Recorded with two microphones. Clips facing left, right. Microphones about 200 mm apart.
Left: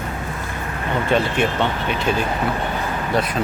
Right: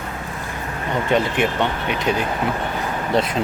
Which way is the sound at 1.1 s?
20° right (ahead or behind).